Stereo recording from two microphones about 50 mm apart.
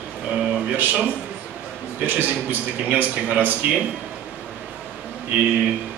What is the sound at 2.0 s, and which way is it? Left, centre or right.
A man's voice, right.